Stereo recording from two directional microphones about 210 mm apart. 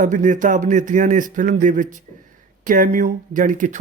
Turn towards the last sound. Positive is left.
turn(degrees=-40)  # may be behind; listen again after turning